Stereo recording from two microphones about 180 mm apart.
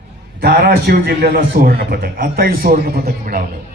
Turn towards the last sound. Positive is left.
turn(degrees=-55)  # may be behind; listen again after turning